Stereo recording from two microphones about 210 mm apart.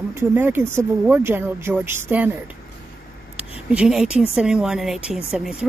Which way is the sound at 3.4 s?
5° right (ahead or behind).